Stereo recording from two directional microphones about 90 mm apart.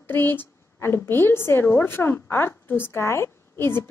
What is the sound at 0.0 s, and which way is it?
A woman's voice, 25° left (ahead or behind).